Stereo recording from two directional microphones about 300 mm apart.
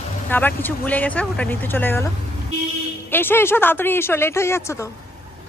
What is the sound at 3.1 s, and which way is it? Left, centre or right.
Speech, centre.